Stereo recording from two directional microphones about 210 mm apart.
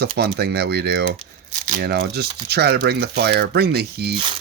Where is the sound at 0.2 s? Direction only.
50° right (ahead or behind).